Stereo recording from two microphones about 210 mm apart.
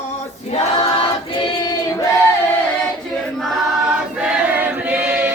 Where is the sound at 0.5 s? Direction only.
25° left (ahead or behind).